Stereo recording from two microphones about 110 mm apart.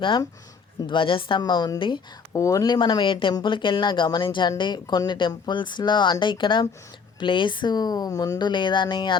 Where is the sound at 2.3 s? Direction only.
30° left (ahead or behind).